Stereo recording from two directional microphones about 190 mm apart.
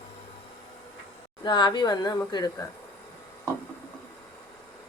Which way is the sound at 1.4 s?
25° left (ahead or behind).